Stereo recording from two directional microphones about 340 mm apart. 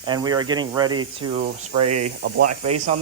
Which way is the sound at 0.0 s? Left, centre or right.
Centre.